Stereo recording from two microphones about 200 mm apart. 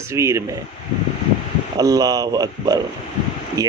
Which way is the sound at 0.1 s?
15° right (ahead or behind).